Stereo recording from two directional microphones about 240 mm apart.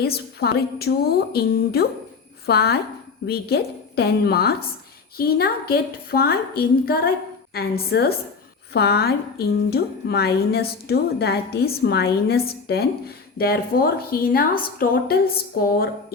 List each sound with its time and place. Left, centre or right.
0.0 s a woman's voice: left